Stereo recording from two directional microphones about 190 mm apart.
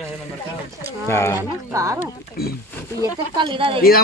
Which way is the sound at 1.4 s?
15° right (ahead or behind).